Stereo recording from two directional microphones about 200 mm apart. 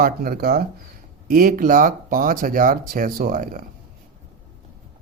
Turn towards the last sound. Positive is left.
turn(degrees=-45)  # may be behind; listen again after turning